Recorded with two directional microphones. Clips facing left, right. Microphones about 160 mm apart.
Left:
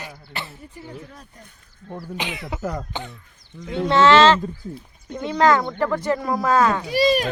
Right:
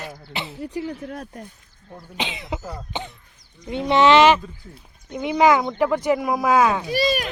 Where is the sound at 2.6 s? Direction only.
85° left.